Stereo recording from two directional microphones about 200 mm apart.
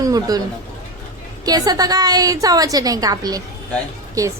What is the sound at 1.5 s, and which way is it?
A woman's voice, 20° right (ahead or behind).